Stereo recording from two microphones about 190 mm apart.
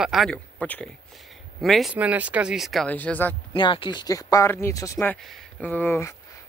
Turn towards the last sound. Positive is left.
turn(degrees=10)  # may be behind; listen again after turning